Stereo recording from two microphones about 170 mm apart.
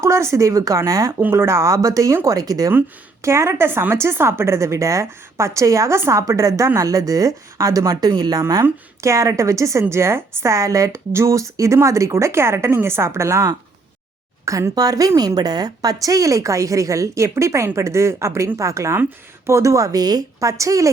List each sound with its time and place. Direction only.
0.0 s a woman's voice: 15° right (ahead or behind)